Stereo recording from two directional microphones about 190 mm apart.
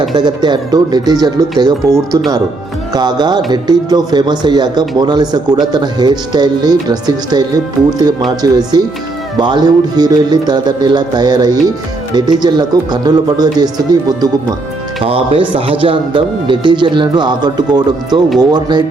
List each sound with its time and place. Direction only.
0.1 s speech: 20° right (ahead or behind)